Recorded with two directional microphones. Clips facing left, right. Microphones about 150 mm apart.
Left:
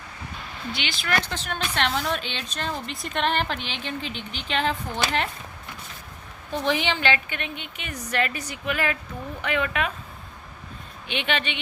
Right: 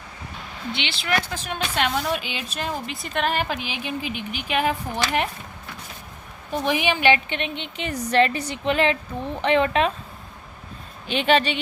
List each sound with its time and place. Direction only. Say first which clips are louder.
0.7 s a woman's voice: right 2 dB; 25° right (ahead or behind)
1.1 s speech: right 2 dB; 10° right (ahead or behind)
6.5 s a woman's voice: right 2 dB; 15° right (ahead or behind); by 9.9 s 30° right (ahead or behind)
11.1 s speech: right 7 dB; 35° right (ahead or behind)